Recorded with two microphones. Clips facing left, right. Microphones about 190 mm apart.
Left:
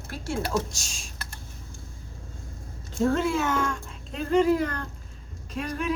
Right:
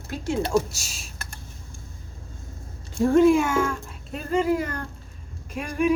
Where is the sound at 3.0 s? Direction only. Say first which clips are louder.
Right 7 dB; 10° right (ahead or behind).